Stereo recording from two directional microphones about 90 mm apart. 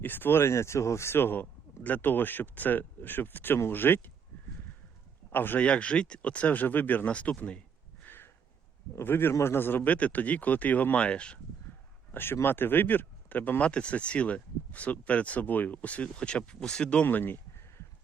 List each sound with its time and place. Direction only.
0.0 s speech: 20° left (ahead or behind)
5.3 s speech: 20° left (ahead or behind)
8.0 s a sound: 25° left (ahead or behind)
9.0 s speech: 25° left (ahead or behind)
12.1 s speech: 25° left (ahead or behind)